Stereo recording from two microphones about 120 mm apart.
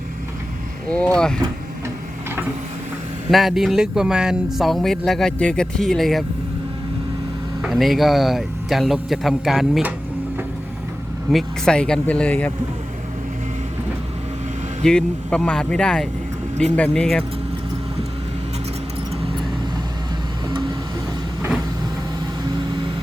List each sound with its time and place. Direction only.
0.9 s speech: 10° left (ahead or behind)
3.3 s speech: centre (ahead or behind)
7.6 s speech: centre (ahead or behind)
11.3 s speech: 5° left (ahead or behind)
14.8 s speech: 5° left (ahead or behind)